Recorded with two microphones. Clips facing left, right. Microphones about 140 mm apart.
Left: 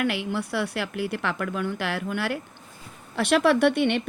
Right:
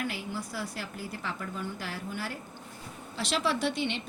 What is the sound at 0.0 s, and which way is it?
A woman's voice, 70° left (ahead or behind).